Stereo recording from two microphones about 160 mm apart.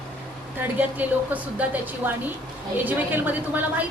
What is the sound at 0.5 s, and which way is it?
A woman's voice, 10° right (ahead or behind).